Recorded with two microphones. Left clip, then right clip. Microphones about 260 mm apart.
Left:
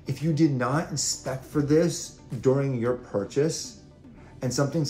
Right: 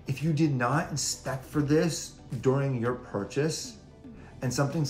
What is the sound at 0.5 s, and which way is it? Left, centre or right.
Speech, centre.